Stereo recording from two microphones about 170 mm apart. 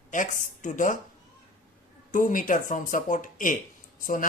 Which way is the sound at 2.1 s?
50° left (ahead or behind).